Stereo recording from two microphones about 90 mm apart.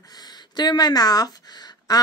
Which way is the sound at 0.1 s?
50° left (ahead or behind).